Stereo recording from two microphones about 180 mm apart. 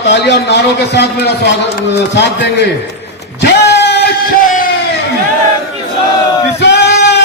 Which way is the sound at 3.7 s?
70° left (ahead or behind).